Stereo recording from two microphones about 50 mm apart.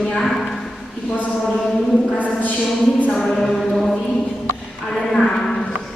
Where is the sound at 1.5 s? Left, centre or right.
Centre.